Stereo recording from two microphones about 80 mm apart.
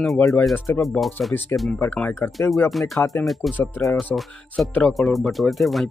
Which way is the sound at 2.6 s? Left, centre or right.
Centre.